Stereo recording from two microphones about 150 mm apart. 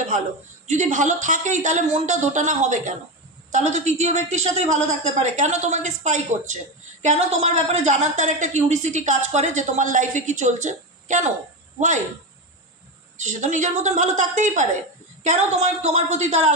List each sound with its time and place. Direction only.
0.7 s a woman's voice: 55° right (ahead or behind)
13.3 s a woman's voice: 55° right (ahead or behind)